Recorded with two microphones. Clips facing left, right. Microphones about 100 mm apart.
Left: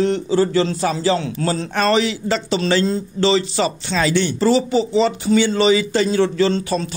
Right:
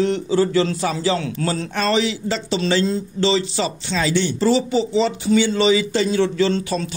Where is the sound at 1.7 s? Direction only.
55° left (ahead or behind).